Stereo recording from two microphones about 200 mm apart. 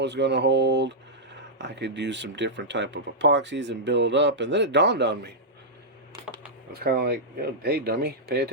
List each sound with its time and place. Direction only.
0.0 s speech: 60° right (ahead or behind)
6.7 s speech: 50° right (ahead or behind)